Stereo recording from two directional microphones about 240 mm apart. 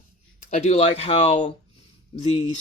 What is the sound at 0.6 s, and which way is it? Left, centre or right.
Speech, left.